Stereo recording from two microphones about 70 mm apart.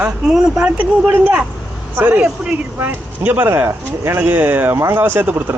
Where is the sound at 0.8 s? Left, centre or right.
Centre.